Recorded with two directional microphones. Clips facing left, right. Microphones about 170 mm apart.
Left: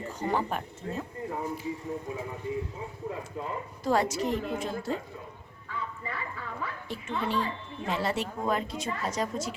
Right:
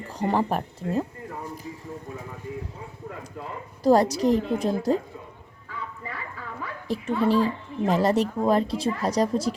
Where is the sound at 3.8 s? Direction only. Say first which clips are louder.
Right 8 dB; 35° right (ahead or behind).